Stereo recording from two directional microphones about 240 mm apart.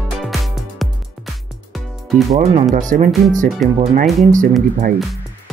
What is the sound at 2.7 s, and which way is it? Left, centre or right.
Speech, right.